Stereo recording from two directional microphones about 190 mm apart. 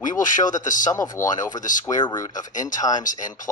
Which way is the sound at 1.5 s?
40° left (ahead or behind).